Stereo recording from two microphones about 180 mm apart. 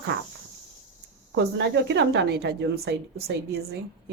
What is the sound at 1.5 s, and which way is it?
A woman's voice, 75° right (ahead or behind).